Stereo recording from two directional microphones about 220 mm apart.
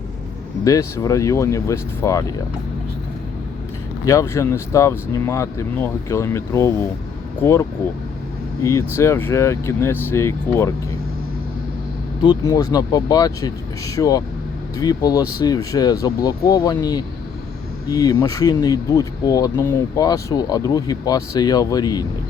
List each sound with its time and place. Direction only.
0.6 s speech: 15° left (ahead or behind)
4.0 s speech: 15° left (ahead or behind)
8.6 s speech: 15° left (ahead or behind)
12.2 s speech: 20° left (ahead or behind)